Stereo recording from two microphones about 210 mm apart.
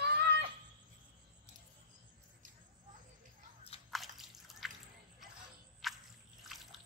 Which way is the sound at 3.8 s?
Centre (ahead or behind).